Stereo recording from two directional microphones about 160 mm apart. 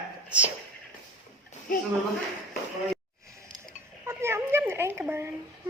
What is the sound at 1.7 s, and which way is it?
Speech, 55° left (ahead or behind).